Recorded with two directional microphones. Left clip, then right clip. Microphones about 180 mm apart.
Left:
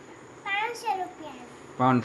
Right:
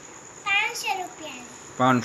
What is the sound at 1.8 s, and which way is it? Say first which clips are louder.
Speech: right 3 dB; centre (ahead or behind).